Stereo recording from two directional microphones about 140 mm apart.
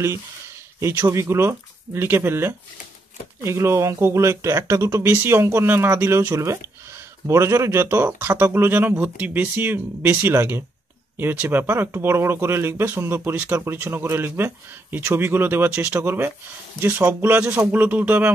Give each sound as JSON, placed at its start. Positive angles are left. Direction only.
{"t": 0.7, "sound": "speech", "side_deg": -20}